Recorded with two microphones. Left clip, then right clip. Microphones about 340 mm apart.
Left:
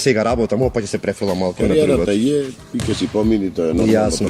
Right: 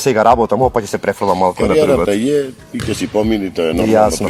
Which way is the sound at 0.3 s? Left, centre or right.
Right.